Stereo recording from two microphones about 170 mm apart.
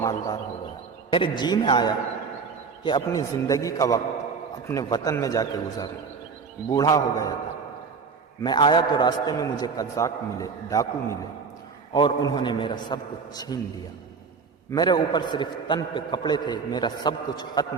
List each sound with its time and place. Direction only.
0.0 s a man's voice: 20° left (ahead or behind)
8.4 s a man's voice: 30° left (ahead or behind)
14.7 s a man's voice: 25° left (ahead or behind)